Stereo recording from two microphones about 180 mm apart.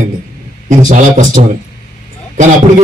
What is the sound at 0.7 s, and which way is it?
A man's voice, 45° right (ahead or behind).